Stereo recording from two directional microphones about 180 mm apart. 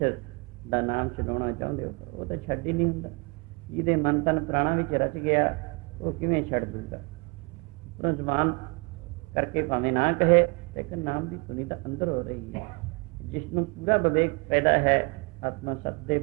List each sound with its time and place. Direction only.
0.7 s a man's voice: 40° left (ahead or behind)
3.8 s a man's voice: 45° left (ahead or behind)
8.0 s a man's voice: 40° left (ahead or behind)